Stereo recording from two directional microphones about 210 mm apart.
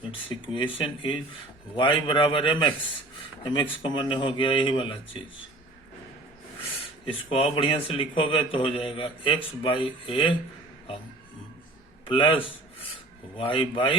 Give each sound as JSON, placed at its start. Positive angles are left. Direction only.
{"t": 0.3, "sound": "a man's voice", "side_deg": 25}
{"t": 7.3, "sound": "a man's voice", "side_deg": 25}
{"t": 12.0, "sound": "a man's voice", "side_deg": 25}